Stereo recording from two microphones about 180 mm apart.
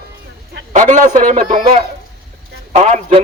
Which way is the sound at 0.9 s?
45° right (ahead or behind).